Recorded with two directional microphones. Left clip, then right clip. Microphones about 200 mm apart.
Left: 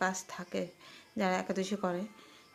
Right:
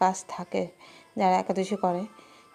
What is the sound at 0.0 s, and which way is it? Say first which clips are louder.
A woman's voice: right 9 dB; 25° right (ahead or behind).